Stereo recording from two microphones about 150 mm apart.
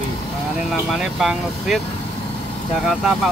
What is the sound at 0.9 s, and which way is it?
Speech, centre (ahead or behind).